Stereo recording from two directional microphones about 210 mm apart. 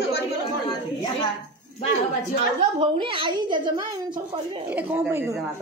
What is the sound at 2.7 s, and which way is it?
Speech, 25° right (ahead or behind).